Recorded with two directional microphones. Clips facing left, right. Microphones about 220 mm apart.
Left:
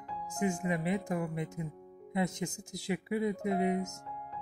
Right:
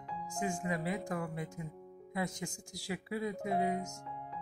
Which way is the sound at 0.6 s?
20° left (ahead or behind).